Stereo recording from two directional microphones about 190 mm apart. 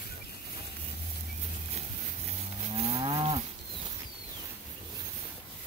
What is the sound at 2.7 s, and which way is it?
Moo, 30° right (ahead or behind).